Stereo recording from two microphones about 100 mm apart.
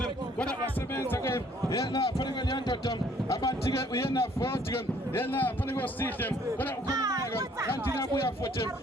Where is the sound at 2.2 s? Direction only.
45° left (ahead or behind).